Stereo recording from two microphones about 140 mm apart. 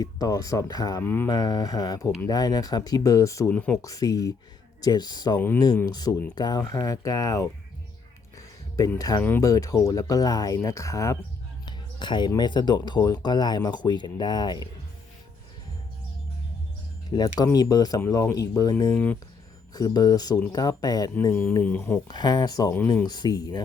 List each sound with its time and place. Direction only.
0.0 s speech: 25° left (ahead or behind)
1.0 s speech: 15° left (ahead or behind)
1.3 s speech: 25° left (ahead or behind)
3.5 s speech: 10° left (ahead or behind)
3.8 s speech: 25° left (ahead or behind)
8.4 s music: 20° left (ahead or behind)
9.0 s speech: 25° left (ahead or behind)
11.6 s a sound: 35° left (ahead or behind)
12.3 s speech: 30° left (ahead or behind)
17.1 s speech: 35° left (ahead or behind)
21.6 s speech: 10° left (ahead or behind)
22.0 s speech: 30° left (ahead or behind)